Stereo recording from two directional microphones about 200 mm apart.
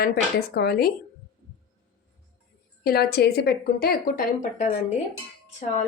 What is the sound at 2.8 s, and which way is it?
A woman's voice, 50° left (ahead or behind).